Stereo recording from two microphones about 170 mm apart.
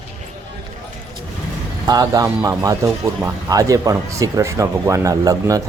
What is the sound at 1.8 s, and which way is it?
Speech, 20° right (ahead or behind).